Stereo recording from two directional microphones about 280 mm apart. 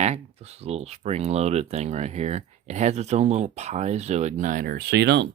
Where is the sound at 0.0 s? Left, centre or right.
Right.